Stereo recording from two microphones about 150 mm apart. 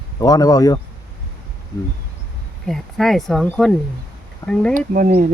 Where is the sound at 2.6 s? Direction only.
Centre (ahead or behind).